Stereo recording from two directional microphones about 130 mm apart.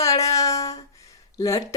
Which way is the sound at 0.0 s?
25° left (ahead or behind).